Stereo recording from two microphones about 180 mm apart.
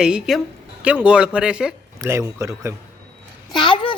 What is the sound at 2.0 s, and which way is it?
Speech, 15° right (ahead or behind).